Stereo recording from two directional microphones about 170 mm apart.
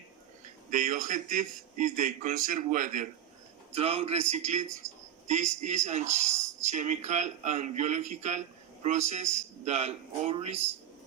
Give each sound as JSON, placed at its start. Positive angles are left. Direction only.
{"t": 0.7, "sound": "speech", "side_deg": -50}
{"t": 3.8, "sound": "speech", "side_deg": -35}